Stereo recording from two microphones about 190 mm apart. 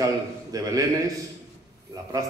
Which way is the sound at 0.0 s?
20° right (ahead or behind).